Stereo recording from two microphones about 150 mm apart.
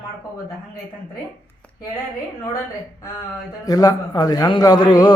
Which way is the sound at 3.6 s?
25° left (ahead or behind).